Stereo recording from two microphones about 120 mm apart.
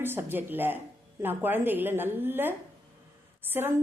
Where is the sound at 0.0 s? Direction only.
20° right (ahead or behind).